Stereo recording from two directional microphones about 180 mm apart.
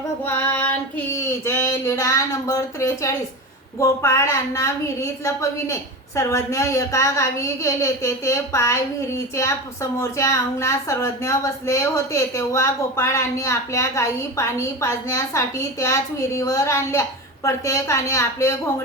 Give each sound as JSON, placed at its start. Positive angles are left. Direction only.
{"t": 0.3, "sound": "child singing", "side_deg": 10}
{"t": 3.8, "sound": "speech", "side_deg": 15}